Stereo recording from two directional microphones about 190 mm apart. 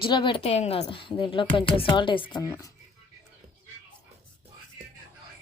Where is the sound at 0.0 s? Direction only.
25° left (ahead or behind).